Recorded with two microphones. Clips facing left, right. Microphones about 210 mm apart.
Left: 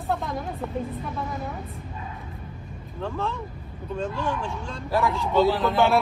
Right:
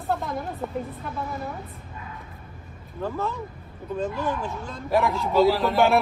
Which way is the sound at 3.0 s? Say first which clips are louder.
Right 1 dB; 5° right (ahead or behind).